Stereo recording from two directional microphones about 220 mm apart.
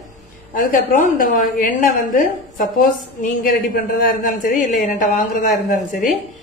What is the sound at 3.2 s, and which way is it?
A woman's voice, 40° left (ahead or behind).